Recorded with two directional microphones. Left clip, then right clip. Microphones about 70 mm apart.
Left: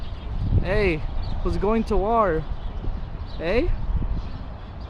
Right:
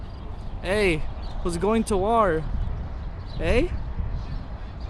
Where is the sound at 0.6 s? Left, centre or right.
Right.